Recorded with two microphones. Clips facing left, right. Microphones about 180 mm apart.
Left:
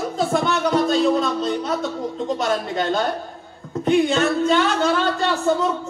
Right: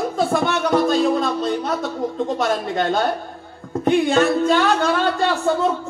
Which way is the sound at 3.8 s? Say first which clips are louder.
Right 1 dB; 55° right (ahead or behind).